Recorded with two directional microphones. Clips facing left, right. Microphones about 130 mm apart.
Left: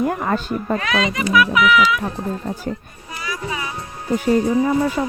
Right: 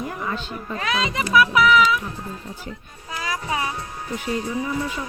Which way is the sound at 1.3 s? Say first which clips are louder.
Even; 35° right (ahead or behind).